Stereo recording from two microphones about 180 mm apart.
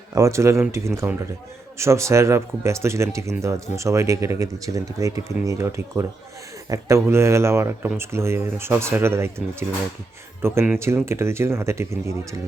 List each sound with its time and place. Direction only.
0.1 s speech: 15° right (ahead or behind)